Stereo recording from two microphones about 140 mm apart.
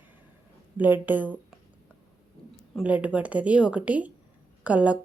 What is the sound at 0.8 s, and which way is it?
Speech, 15° right (ahead or behind).